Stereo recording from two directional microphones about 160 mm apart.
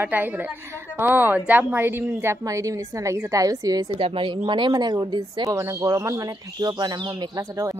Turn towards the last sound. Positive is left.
turn(degrees=-25)  # may be behind; listen again after turning